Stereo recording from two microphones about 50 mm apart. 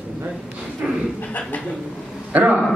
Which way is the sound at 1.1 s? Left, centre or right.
Left.